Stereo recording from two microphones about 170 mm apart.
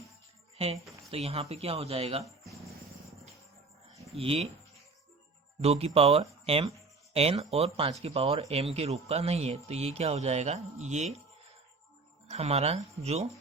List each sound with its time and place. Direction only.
0.5 s speech: 35° right (ahead or behind)
4.2 s speech: 35° right (ahead or behind)
5.6 s speech: 35° right (ahead or behind)
12.3 s speech: 40° right (ahead or behind)